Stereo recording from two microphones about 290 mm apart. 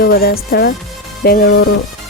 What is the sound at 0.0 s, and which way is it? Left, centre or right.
Speech, left.